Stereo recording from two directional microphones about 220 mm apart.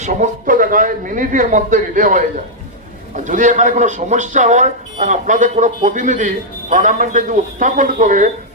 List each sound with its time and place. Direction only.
0.0 s speech: 35° right (ahead or behind)
3.2 s speech: 35° right (ahead or behind)